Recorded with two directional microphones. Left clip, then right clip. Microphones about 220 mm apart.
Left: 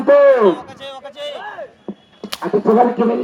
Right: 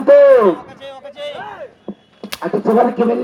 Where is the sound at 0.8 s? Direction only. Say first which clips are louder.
Even; 30° left (ahead or behind).